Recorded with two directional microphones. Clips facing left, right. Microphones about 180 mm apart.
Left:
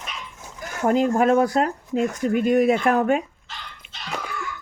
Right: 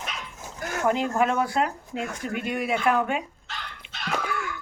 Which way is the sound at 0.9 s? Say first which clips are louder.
Left 6 dB; 40° left (ahead or behind).